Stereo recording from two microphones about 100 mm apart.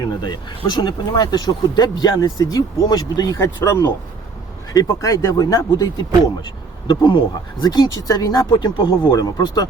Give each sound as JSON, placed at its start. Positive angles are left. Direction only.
{"t": 0.0, "sound": "speech", "side_deg": 50}
{"t": 6.4, "sound": "speech", "side_deg": 55}
{"t": 7.6, "sound": "speech", "side_deg": 45}
{"t": 9.1, "sound": "speech", "side_deg": 40}